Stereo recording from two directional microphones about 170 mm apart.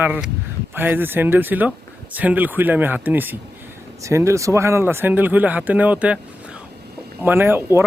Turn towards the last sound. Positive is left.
turn(degrees=-15)  # may be behind; listen again after turning